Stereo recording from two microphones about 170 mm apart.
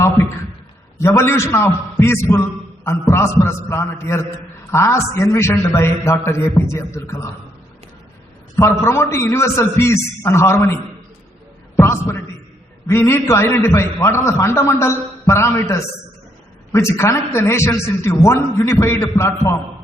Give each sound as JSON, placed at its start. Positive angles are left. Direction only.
{"t": 0.9, "sound": "a man's voice", "side_deg": 15}
{"t": 8.5, "sound": "a man's voice", "side_deg": 15}
{"t": 11.8, "sound": "a man's voice", "side_deg": 15}